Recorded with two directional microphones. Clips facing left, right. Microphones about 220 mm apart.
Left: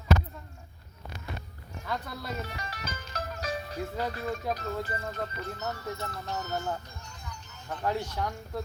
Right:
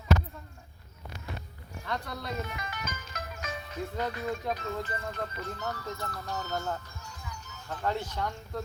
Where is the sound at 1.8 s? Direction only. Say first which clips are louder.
Even; 5° left (ahead or behind).